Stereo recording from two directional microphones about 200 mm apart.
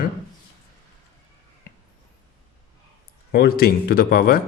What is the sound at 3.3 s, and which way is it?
Speech, 50° left (ahead or behind).